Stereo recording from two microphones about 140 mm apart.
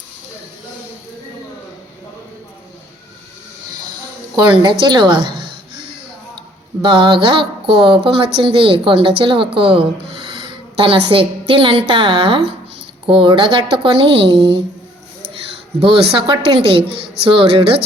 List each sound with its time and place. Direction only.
4.4 s a woman's voice: 35° right (ahead or behind)
15.8 s a woman's voice: 35° right (ahead or behind)